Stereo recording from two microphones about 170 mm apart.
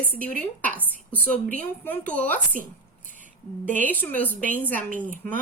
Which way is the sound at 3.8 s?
10° left (ahead or behind).